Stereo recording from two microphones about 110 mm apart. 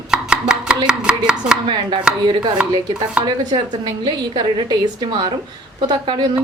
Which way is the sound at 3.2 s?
40° right (ahead or behind).